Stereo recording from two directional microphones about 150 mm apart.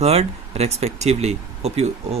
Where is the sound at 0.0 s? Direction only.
45° right (ahead or behind).